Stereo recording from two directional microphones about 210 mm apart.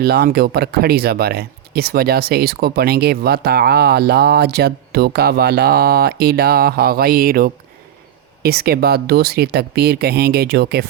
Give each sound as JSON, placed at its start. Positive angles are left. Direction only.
{"t": 0.0, "sound": "speech", "side_deg": -50}